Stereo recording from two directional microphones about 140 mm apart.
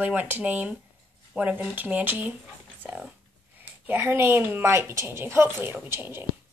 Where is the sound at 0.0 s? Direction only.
10° right (ahead or behind).